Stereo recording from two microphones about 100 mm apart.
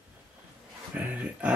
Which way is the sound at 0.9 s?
15° right (ahead or behind).